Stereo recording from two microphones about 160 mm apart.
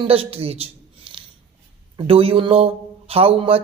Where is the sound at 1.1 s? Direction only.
30° right (ahead or behind).